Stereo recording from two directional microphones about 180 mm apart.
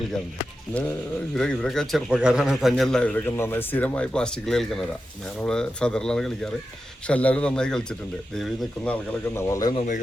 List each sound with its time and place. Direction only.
0.7 s a man's voice: 5° left (ahead or behind)
9.7 s speech: 45° left (ahead or behind)